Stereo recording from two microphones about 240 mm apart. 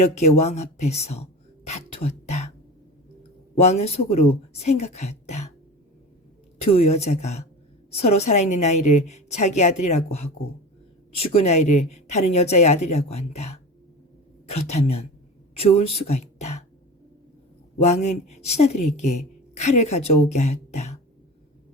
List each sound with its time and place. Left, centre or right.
0.0 s speech: left
3.5 s speech: left
6.6 s speech: left
17.8 s speech: left